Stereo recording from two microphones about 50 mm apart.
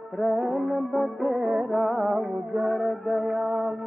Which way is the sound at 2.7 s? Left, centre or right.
Centre.